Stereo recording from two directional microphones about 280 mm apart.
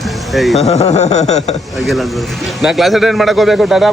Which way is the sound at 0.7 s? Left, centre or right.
Left.